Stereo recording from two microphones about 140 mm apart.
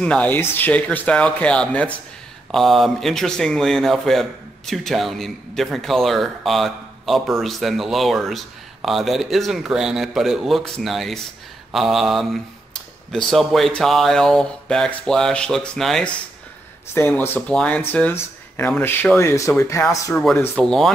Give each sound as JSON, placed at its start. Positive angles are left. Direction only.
{"t": 0.0, "sound": "speech", "side_deg": 10}
{"t": 16.9, "sound": "speech", "side_deg": 15}
{"t": 20.5, "sound": "speech", "side_deg": 5}